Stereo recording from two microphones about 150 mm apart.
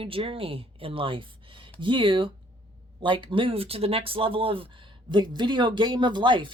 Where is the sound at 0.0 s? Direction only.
35° right (ahead or behind).